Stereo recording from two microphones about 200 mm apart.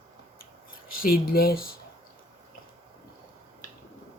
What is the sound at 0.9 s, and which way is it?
Speech, 45° left (ahead or behind).